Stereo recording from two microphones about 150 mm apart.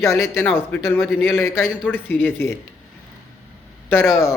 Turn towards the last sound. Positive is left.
turn(degrees=15)  # may be behind; listen again after turning